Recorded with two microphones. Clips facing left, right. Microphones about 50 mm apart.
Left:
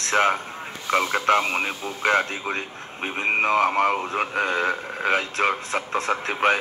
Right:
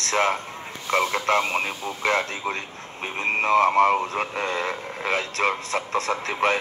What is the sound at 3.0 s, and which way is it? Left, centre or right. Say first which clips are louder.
Speech: left 1 dB; left.